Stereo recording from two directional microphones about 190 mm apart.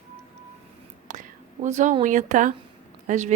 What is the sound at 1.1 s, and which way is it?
Whispering, 40° right (ahead or behind).